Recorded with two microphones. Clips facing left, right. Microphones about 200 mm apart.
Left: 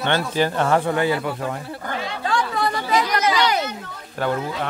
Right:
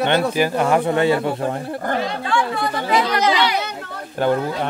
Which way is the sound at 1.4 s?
40° right (ahead or behind).